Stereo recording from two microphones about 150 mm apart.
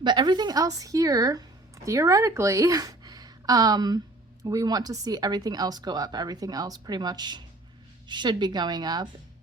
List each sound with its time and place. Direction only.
0.0 s a woman's voice: 30° right (ahead or behind)